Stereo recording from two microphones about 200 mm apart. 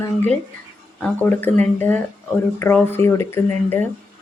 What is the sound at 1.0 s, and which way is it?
Speech, 10° left (ahead or behind).